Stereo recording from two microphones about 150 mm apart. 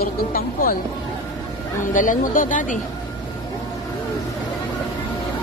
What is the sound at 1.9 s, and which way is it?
Speech, 60° left (ahead or behind).